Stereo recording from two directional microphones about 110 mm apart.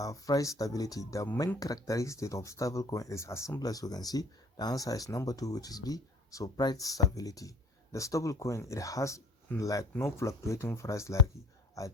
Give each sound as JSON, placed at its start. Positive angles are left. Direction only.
{"t": 0.0, "sound": "speech", "side_deg": 30}